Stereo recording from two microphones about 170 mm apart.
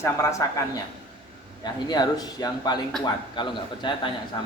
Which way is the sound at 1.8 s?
25° left (ahead or behind).